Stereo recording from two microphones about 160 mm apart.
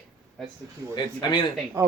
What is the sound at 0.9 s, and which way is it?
Speech, 30° left (ahead or behind).